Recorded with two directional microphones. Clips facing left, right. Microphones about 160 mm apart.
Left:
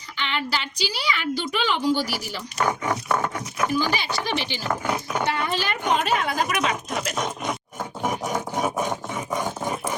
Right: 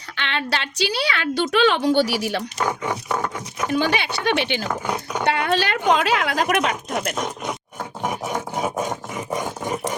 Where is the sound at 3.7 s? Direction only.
65° right (ahead or behind).